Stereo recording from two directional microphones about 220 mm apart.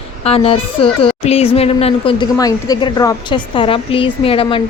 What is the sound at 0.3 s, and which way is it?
A woman's voice, 25° left (ahead or behind).